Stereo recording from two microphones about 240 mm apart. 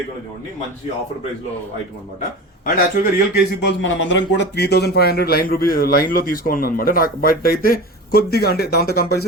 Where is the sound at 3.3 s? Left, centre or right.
Left.